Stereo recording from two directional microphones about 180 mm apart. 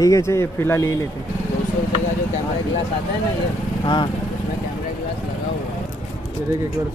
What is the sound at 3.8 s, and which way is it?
Speech, 25° left (ahead or behind).